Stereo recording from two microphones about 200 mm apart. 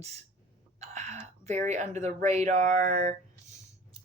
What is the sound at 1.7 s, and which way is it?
Speech, 35° right (ahead or behind).